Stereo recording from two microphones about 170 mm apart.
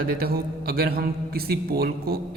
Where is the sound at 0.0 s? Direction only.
60° right (ahead or behind).